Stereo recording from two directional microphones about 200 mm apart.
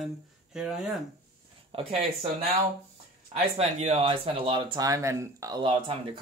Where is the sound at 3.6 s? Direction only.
30° right (ahead or behind).